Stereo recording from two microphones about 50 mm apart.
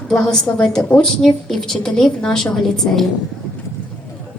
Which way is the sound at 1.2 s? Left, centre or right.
Centre.